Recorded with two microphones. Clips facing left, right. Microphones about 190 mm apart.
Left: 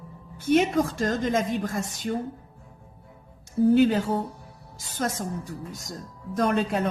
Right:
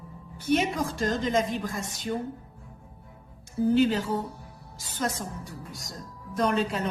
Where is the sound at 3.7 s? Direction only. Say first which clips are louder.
Left 2 dB; 50° left (ahead or behind).